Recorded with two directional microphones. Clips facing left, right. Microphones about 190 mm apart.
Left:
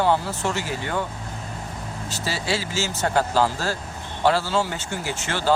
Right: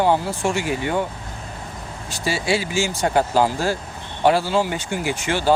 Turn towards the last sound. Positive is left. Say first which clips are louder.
# right 5 dB
turn(degrees=-15)  # may be behind; listen again after turning